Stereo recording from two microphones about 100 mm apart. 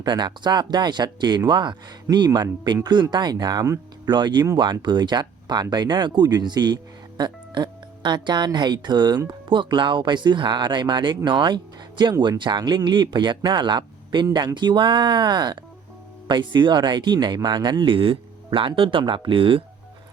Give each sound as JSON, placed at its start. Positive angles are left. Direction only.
{"t": 0.0, "sound": "speech", "side_deg": -45}